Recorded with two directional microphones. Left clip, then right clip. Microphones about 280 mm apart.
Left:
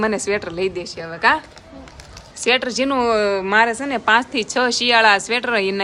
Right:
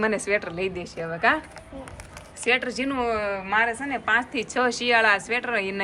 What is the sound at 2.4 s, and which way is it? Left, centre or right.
A woman's voice, centre.